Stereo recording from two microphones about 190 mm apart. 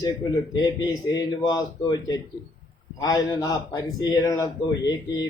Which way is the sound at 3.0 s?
20° left (ahead or behind).